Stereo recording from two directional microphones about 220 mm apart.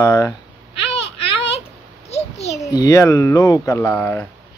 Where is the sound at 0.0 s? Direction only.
15° left (ahead or behind).